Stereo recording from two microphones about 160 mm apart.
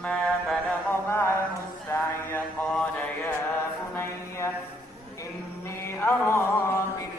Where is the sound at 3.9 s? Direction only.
15° left (ahead or behind).